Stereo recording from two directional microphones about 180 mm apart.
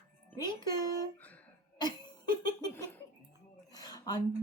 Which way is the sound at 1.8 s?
20° left (ahead or behind).